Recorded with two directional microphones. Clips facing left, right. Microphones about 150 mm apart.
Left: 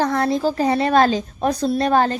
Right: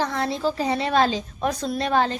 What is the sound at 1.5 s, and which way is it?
Speech, 35° left (ahead or behind).